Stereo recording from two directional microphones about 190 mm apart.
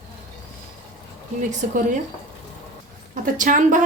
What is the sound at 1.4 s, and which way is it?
Speech, 40° right (ahead or behind).